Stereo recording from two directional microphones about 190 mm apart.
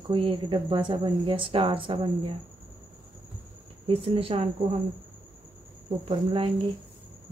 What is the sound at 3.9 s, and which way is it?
Speech, 30° right (ahead or behind).